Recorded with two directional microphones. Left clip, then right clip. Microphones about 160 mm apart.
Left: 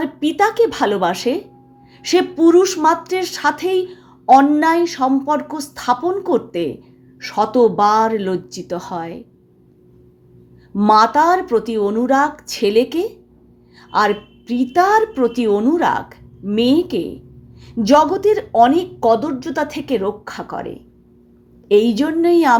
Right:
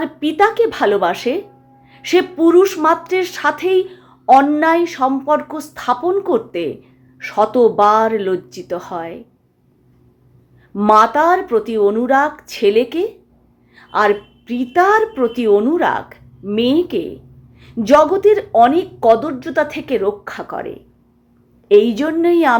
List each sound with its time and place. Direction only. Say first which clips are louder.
0.0 s a woman's voice: right 2 dB; 20° left (ahead or behind)
10.8 s a woman's voice: right 1 dB; 20° left (ahead or behind)